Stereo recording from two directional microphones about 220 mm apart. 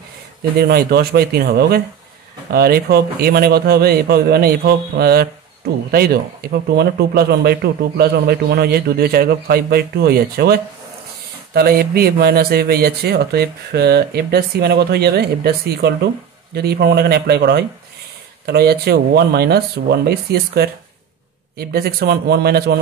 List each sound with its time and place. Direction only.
0.6 s speech: 45° right (ahead or behind)